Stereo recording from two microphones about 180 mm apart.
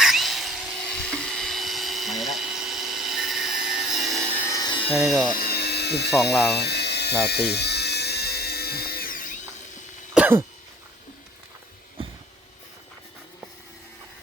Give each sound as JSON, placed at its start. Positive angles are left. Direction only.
{"t": 0.0, "sound": "wood", "side_deg": 0}
{"t": 5.0, "sound": "speech", "side_deg": 0}
{"t": 5.3, "sound": "a sound", "side_deg": 60}
{"t": 6.5, "sound": "helicopter", "side_deg": 65}
{"t": 10.2, "sound": "throat clearing", "side_deg": -10}